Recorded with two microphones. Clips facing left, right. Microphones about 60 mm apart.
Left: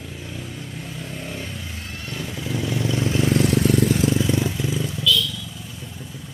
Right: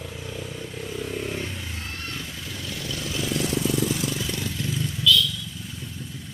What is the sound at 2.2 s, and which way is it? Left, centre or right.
Vehicle, left.